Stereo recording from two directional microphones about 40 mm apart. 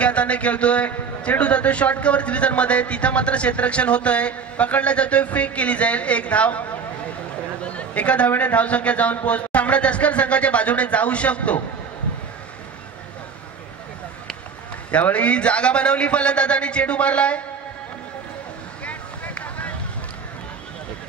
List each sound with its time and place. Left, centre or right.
0.0 s a man's voice: left
7.6 s chatter: left
8.4 s a man's voice: left
14.9 s a man's voice: left
18.9 s a sound: left